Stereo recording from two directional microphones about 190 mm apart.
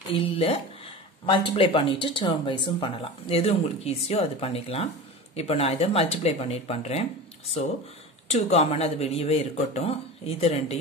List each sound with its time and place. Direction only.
0.1 s speech: 30° left (ahead or behind)
8.3 s speech: 35° left (ahead or behind)